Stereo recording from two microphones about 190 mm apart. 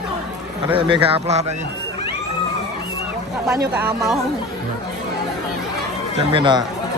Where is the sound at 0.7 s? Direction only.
30° right (ahead or behind).